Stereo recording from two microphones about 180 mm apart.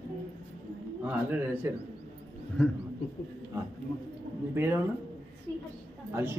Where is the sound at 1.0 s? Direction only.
10° right (ahead or behind).